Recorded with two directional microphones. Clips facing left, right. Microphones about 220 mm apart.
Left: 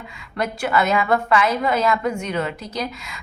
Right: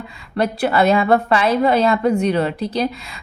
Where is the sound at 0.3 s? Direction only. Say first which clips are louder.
Right 4 dB; 35° right (ahead or behind).